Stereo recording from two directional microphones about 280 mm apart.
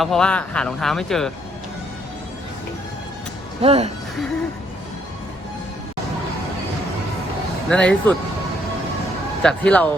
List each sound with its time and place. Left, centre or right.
0.0 s speech: centre
3.6 s speech: right
7.7 s speech: centre
9.4 s speech: centre